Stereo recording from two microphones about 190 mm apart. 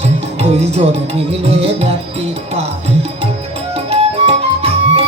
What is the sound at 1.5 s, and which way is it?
Music, 35° right (ahead or behind).